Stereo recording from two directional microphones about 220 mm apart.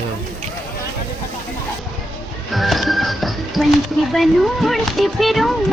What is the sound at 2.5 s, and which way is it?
Speech, centre (ahead or behind).